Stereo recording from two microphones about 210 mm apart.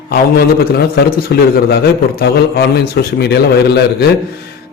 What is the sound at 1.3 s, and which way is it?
A man's voice, 50° left (ahead or behind).